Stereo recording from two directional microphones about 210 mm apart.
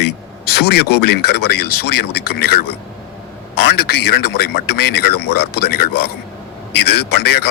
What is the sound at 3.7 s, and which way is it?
A man's voice, 50° left (ahead or behind).